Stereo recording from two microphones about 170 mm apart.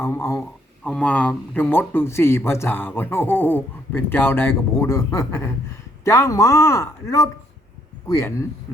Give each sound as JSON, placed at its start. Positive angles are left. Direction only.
{"t": 0.0, "sound": "speech", "side_deg": 15}